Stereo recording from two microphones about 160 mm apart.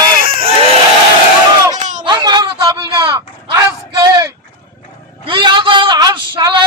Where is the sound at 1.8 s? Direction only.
50° right (ahead or behind).